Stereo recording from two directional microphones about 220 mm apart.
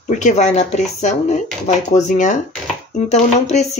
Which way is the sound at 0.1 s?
35° left (ahead or behind).